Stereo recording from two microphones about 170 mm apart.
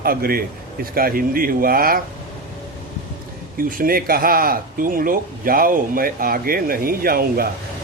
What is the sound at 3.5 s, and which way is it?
Speech, 55° right (ahead or behind).